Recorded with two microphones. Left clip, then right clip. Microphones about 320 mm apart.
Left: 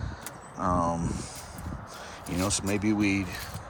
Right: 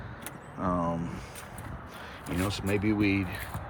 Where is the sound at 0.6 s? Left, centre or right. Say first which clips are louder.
Left 3 dB; centre.